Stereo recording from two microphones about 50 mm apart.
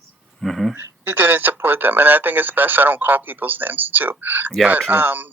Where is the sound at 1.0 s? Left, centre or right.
Right.